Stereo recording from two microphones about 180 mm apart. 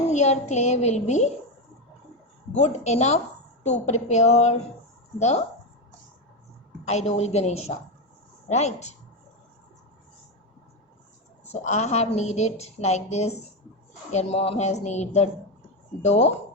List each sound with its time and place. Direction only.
0.1 s a woman's voice: 40° left (ahead or behind)
2.6 s a woman's voice: 40° left (ahead or behind)
6.8 s a woman's voice: 40° left (ahead or behind)
11.6 s a woman's voice: 40° left (ahead or behind)